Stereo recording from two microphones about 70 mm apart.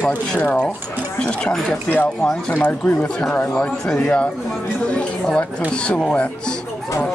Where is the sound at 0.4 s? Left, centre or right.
Left.